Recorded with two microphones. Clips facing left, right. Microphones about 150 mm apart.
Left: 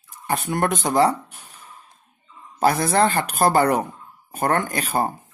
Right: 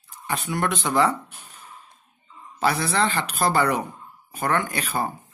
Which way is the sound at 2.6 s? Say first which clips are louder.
Left 5 dB; 45° left (ahead or behind).